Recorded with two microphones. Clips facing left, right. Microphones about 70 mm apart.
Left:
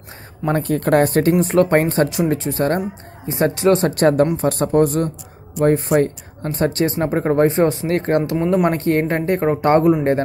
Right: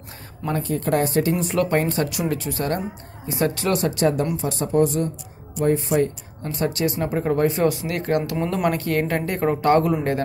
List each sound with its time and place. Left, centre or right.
0.5 s speech: left
1.4 s speech: left
3.8 s speech: left